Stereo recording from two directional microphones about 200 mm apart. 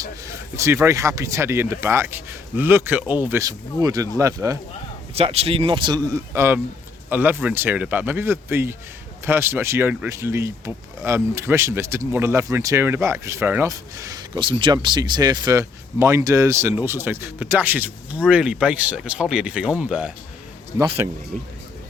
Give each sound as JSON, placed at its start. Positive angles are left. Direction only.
{"t": 0.5, "sound": "speech", "side_deg": -15}
{"t": 5.1, "sound": "speech", "side_deg": -30}